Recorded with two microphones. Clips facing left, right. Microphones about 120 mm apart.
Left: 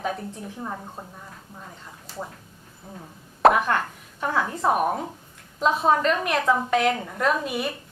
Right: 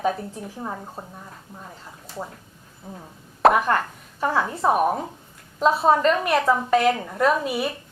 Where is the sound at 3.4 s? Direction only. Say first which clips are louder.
Right 1 dB; centre (ahead or behind).